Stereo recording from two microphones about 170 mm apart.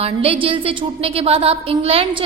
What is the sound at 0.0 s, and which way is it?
A woman's voice, 35° right (ahead or behind).